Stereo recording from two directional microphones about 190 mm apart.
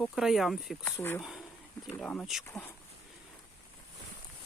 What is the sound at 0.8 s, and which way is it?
Speech, 10° left (ahead or behind).